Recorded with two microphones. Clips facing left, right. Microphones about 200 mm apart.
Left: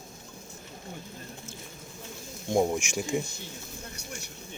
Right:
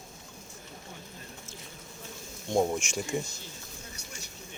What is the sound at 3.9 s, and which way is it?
Vehicle, 60° left (ahead or behind).